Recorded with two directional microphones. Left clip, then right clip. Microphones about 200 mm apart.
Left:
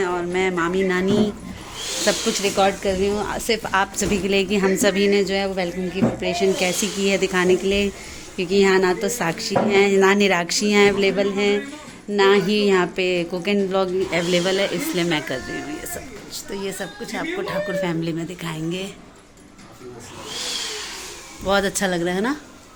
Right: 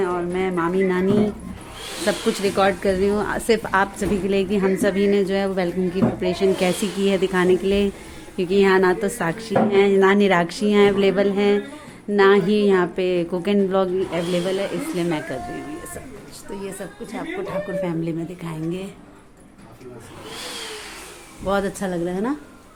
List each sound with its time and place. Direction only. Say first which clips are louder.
0.0 s a woman's voice: left 1 dB; 5° right (ahead or behind)
2.4 s speech: right 1 dB; 25° right (ahead or behind)
3.6 s a woman's voice: even; 10° right (ahead or behind)
11.0 s speech: right 1 dB; 25° right (ahead or behind)
14.1 s speech: left 3 dB; centre (ahead or behind)
16.5 s speech: left 3 dB; centre (ahead or behind)
21.4 s a woman's voice: left 3 dB; 10° right (ahead or behind)